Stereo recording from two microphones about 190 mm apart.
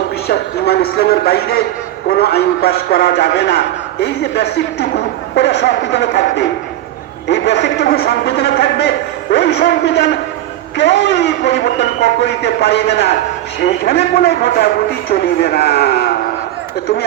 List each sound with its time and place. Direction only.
0.3 s a man's voice: 55° left (ahead or behind)